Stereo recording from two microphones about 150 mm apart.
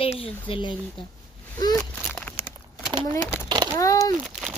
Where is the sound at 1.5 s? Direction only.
25° left (ahead or behind).